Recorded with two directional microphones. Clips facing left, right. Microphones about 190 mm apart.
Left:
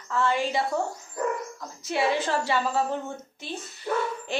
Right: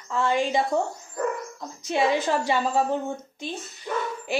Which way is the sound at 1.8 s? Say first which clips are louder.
Right 2 dB; 15° right (ahead or behind).